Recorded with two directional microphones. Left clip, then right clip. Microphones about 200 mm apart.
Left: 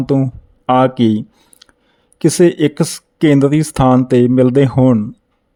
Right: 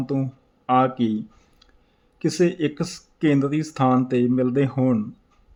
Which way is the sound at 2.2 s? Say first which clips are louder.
Left 10 dB; 45° left (ahead or behind).